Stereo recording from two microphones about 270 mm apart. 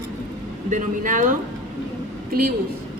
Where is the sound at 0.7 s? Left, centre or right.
Right.